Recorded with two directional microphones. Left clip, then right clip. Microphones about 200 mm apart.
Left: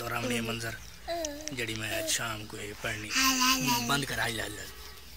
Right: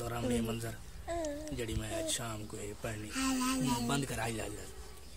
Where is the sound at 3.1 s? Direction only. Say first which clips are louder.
Left 10 dB; 20° right (ahead or behind).